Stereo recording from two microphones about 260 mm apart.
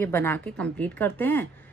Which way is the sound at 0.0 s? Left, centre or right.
Centre.